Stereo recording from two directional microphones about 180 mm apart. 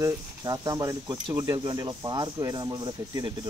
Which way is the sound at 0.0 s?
20° right (ahead or behind).